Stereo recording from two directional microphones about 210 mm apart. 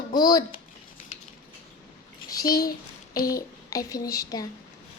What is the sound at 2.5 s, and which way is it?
Speech, 45° left (ahead or behind).